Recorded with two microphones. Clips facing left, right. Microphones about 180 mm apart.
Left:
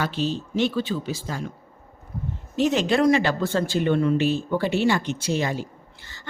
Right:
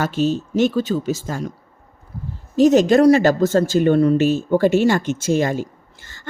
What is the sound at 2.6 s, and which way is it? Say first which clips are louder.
Speech: right 8 dB; 45° right (ahead or behind).